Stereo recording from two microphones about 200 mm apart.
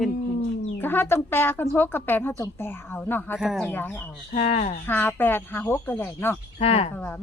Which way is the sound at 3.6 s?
10° left (ahead or behind).